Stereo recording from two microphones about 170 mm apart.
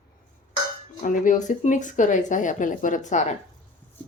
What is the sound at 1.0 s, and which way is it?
Speech, 50° left (ahead or behind).